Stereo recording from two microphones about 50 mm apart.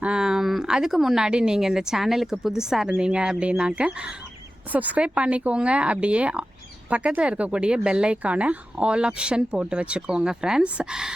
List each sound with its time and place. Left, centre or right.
0.0 s speech: centre
4.7 s a woman's voice: right; by 11.1 s centre